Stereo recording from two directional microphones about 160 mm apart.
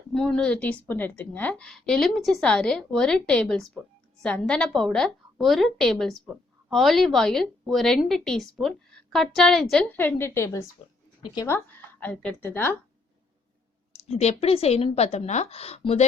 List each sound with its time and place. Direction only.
0.1 s a woman's voice: 5° left (ahead or behind)
13.9 s speech: 40° left (ahead or behind)